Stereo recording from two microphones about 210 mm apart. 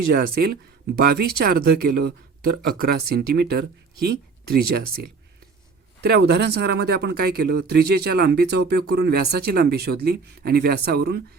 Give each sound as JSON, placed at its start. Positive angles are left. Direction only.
{"t": 0.1, "sound": "speech", "side_deg": -50}